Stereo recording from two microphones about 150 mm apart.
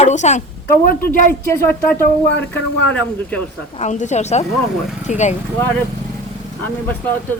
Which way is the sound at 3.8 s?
50° left (ahead or behind).